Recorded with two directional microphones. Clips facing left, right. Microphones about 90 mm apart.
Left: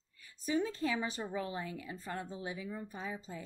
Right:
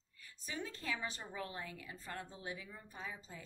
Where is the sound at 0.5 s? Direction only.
15° left (ahead or behind).